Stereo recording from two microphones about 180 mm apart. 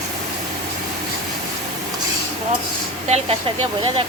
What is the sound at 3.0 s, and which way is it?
Speech, 35° right (ahead or behind).